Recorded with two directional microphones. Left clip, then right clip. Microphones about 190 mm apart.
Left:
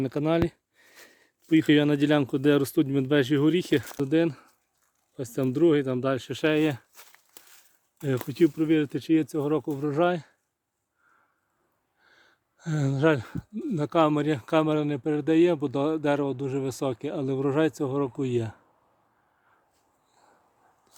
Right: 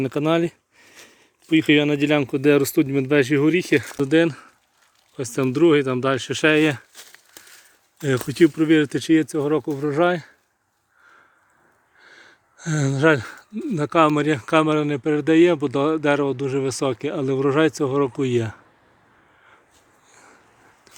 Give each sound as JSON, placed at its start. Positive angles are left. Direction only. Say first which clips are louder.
{"t": 0.0, "sound": "a sound", "louder": "right 5 dB", "side_deg": 5}
{"t": 1.0, "sound": "speech", "louder": "right 2 dB", "side_deg": 20}
{"t": 3.8, "sound": "speech", "louder": "right 6 dB", "side_deg": 0}
{"t": 6.9, "sound": "crumpling", "louder": "right 8 dB", "side_deg": -5}
{"t": 8.3, "sound": "speech", "louder": "right 6 dB", "side_deg": 0}
{"t": 9.2, "sound": "speech", "louder": "right 5 dB", "side_deg": 10}
{"t": 11.9, "sound": "speech", "louder": "right 12 dB", "side_deg": 5}